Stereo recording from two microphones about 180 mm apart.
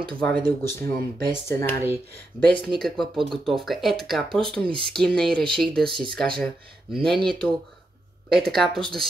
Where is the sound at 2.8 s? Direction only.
Centre (ahead or behind).